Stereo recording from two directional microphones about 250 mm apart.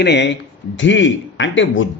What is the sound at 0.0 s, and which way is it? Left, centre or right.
Speech, left.